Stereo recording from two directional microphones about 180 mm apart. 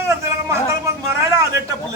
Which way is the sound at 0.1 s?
15° right (ahead or behind).